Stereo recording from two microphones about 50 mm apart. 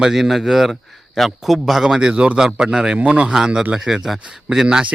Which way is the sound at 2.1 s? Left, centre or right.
Right.